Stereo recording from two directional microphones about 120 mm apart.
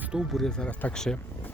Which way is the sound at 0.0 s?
5° right (ahead or behind).